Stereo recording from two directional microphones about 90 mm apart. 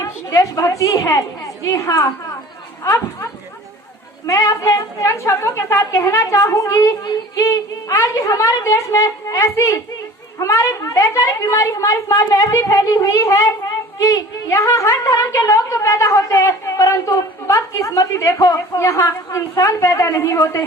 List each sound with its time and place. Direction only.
0.3 s speech: 40° left (ahead or behind)
4.3 s a woman's voice: 45° left (ahead or behind)
18.8 s speech: 35° left (ahead or behind)